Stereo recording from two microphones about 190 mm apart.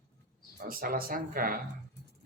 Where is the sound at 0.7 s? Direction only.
50° right (ahead or behind).